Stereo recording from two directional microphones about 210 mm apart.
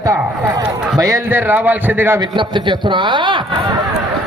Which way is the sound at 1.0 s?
10° right (ahead or behind).